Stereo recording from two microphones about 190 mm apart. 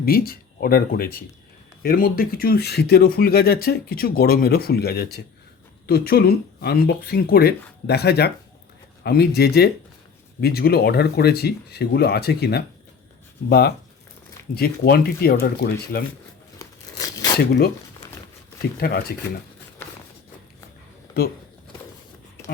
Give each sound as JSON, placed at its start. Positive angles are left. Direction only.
{"t": 0.0, "sound": "speech", "side_deg": 50}
{"t": 16.6, "sound": "scissors", "side_deg": 20}
{"t": 17.3, "sound": "speech", "side_deg": 60}
{"t": 18.8, "sound": "speech", "side_deg": 55}
{"t": 21.2, "sound": "speech", "side_deg": 55}